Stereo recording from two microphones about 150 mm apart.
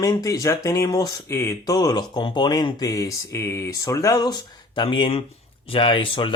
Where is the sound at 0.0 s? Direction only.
25° left (ahead or behind).